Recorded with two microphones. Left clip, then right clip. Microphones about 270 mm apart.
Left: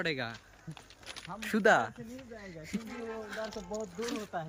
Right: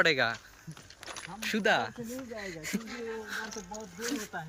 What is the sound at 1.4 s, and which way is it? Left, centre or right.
Speech, centre.